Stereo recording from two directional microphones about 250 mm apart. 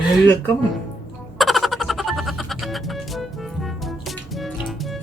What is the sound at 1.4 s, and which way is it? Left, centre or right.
Music, centre.